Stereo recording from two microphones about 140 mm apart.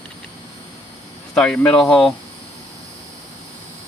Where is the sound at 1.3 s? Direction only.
5° left (ahead or behind).